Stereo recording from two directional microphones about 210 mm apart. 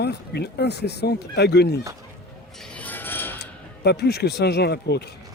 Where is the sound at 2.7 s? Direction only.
10° left (ahead or behind).